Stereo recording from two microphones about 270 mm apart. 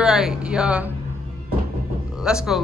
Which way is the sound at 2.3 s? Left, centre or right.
Centre.